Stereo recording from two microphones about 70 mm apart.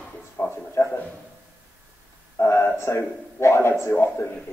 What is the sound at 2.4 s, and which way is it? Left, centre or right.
Speech, left.